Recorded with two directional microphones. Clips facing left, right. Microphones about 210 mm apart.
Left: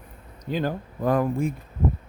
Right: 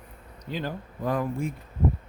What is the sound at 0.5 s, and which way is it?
Speech, 50° left (ahead or behind).